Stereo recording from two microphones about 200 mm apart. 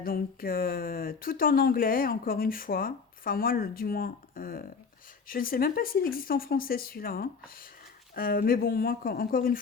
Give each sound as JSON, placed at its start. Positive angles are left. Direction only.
{"t": 0.0, "sound": "speech", "side_deg": 45}